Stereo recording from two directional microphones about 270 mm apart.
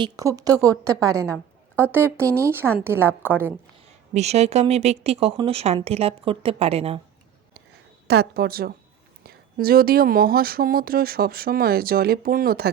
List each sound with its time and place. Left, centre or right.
0.0 s a woman's voice: centre
4.1 s speech: right
8.0 s speech: right